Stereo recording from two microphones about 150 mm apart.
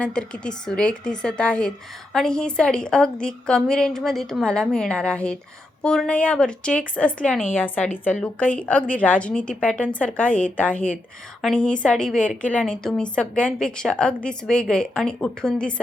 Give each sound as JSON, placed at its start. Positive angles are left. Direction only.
{"t": 0.0, "sound": "a woman's voice", "side_deg": 5}